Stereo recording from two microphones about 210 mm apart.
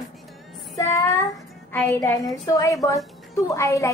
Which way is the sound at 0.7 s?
15° left (ahead or behind).